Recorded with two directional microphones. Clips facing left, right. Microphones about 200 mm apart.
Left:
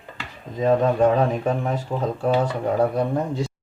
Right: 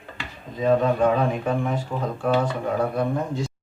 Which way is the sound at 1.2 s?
35° left (ahead or behind).